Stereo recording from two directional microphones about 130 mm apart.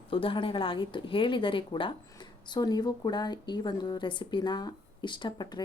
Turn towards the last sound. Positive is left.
turn(degrees=35)  # may be behind; listen again after turning